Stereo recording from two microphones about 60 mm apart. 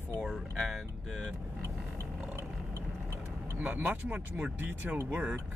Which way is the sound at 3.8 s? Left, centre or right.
Right.